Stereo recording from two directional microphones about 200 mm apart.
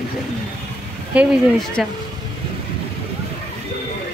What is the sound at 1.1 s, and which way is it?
Speech, 5° right (ahead or behind).